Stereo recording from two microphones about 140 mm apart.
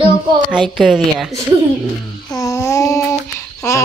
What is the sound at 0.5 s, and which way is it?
Speech, 5° right (ahead or behind).